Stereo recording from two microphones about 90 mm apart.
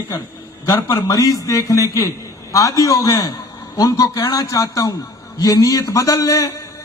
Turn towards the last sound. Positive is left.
turn(degrees=40)  # may be behind; listen again after turning